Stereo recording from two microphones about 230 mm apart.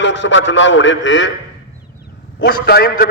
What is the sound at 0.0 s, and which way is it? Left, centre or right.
A man's voice, left.